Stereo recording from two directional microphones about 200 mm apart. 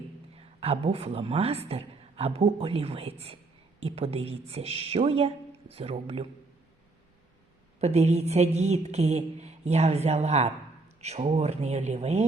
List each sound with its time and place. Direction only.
0.3 s a woman's voice: 30° right (ahead or behind)
7.8 s a woman's voice: 35° right (ahead or behind)